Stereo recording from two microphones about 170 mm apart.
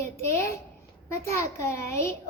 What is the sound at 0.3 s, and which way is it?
A child's voice, 15° left (ahead or behind).